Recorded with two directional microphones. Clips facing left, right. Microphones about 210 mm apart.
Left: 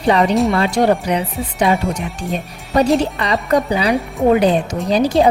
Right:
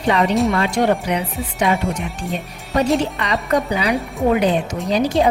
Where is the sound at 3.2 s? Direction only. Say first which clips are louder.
Left 3 dB; 30° left (ahead or behind).